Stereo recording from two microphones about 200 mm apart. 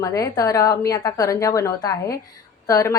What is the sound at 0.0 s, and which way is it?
Speech, 15° left (ahead or behind).